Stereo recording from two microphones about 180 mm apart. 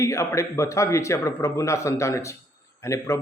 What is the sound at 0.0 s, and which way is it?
A man's voice, 15° left (ahead or behind).